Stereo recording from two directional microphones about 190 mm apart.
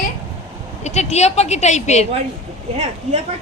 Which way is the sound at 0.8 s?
35° left (ahead or behind).